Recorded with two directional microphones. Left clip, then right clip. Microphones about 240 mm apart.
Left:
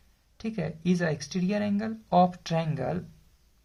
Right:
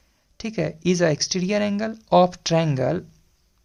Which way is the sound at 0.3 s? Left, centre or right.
Right.